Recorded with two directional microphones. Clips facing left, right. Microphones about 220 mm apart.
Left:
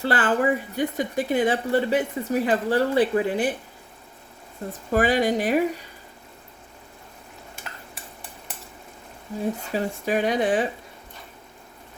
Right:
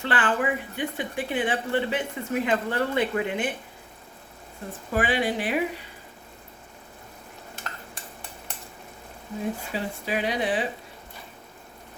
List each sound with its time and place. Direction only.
0.0 s speech: 40° left (ahead or behind)
4.9 s speech: 40° left (ahead or behind)
9.7 s speech: 45° left (ahead or behind)